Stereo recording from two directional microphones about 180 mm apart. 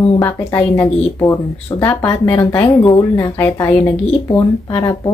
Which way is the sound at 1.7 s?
20° left (ahead or behind).